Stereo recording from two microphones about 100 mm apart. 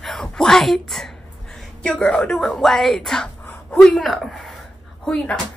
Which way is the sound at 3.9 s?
Centre (ahead or behind).